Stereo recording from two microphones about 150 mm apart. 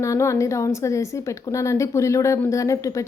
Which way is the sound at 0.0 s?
20° left (ahead or behind).